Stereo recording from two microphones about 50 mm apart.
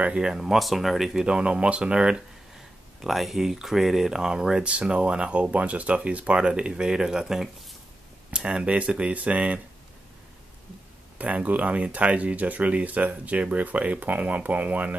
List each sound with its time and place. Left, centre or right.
0.1 s speech: centre
1.2 s speech: centre
3.0 s speech: centre; by 9.6 s right
11.1 s speech: right